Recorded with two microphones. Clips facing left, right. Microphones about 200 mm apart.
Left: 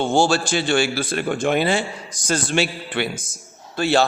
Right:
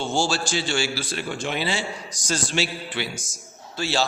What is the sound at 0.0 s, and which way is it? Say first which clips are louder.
A man's voice: left 6 dB; 55° left (ahead or behind).